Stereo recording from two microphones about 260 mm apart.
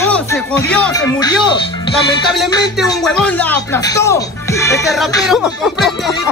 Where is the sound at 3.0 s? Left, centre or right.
Centre.